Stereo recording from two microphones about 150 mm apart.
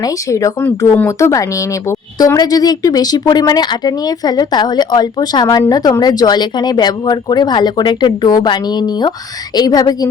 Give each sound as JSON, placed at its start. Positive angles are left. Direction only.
{"t": 0.0, "sound": "speech", "side_deg": 20}